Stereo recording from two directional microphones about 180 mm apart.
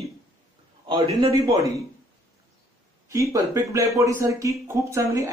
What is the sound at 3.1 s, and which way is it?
Speech, 15° right (ahead or behind).